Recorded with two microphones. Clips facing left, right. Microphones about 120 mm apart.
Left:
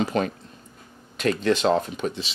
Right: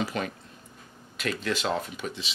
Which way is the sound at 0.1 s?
30° left (ahead or behind).